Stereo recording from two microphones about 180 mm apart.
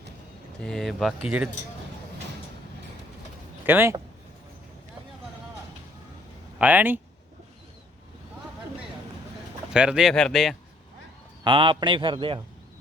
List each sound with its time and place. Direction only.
0.6 s speech: centre (ahead or behind)
3.7 s speech: 10° right (ahead or behind)
6.6 s speech: 10° right (ahead or behind)
9.7 s speech: 5° right (ahead or behind)
11.4 s a man's voice: 30° right (ahead or behind)